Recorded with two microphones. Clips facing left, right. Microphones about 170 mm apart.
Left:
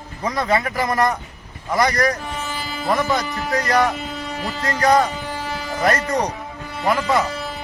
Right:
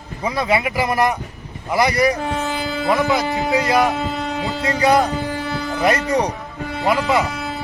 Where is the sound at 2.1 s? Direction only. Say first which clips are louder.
Right 6 dB; 65° right (ahead or behind).